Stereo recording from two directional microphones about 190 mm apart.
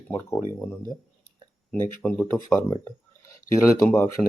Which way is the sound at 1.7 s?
5° left (ahead or behind).